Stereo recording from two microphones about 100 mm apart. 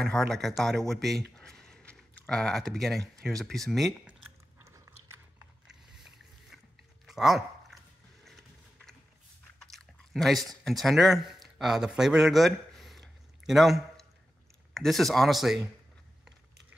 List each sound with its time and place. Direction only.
0.0 s speech: 5° left (ahead or behind)
4.0 s chewing: 10° right (ahead or behind)
4.6 s biting: 30° right (ahead or behind)
5.7 s a sound: 5° right (ahead or behind)
9.6 s chewing: 5° left (ahead or behind)
14.7 s speech: 5° left (ahead or behind)